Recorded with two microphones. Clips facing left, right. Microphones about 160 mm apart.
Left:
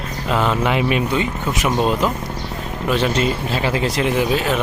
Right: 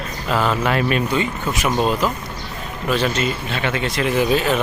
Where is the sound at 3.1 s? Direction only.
30° left (ahead or behind).